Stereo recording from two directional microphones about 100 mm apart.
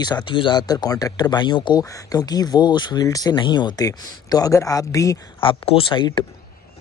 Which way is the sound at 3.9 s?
35° left (ahead or behind).